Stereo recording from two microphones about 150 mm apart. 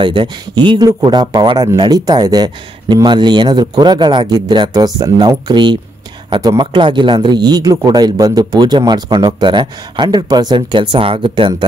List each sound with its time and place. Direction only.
0.0 s speech: 30° right (ahead or behind)